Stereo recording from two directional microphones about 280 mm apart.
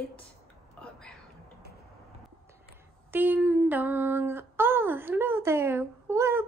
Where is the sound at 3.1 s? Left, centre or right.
Centre.